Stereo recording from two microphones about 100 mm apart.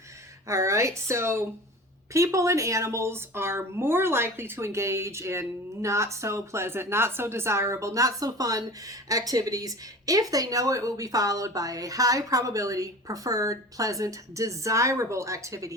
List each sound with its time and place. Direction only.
0.4 s speech: 30° right (ahead or behind)